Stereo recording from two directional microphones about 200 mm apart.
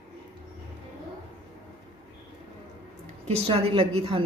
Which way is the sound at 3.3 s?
30° right (ahead or behind).